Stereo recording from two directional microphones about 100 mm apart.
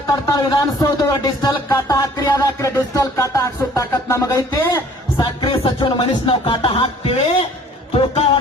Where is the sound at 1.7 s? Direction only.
30° left (ahead or behind).